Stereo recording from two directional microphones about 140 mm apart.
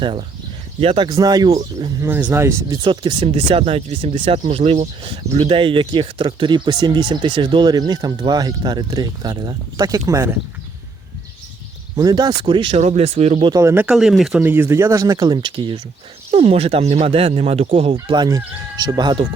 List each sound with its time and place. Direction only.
0.0 s speech: 35° right (ahead or behind)
1.0 s speech: 25° right (ahead or behind)
2.0 s speech: 15° right (ahead or behind)
11.9 s speech: 25° right (ahead or behind)
12.8 s speech: 50° right (ahead or behind)
13.5 s speech: 20° right (ahead or behind)
13.9 s speech: centre (ahead or behind); by 17.9 s 50° right (ahead or behind)
17.9 s speech: 30° right (ahead or behind)